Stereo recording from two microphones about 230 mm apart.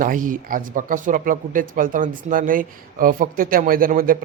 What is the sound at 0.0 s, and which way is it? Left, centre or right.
Speech, right.